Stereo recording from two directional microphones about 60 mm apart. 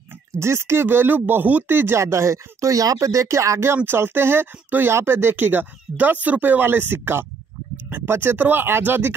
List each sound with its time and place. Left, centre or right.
0.4 s speech: right
2.0 s speech: right
3.7 s speech: right